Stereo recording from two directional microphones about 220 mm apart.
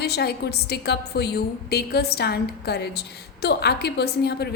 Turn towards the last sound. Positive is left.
turn(degrees=45)  # may be behind; listen again after turning